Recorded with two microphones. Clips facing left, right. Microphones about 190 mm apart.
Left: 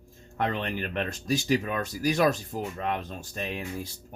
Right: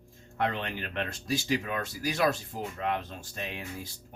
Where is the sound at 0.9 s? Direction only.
40° left (ahead or behind).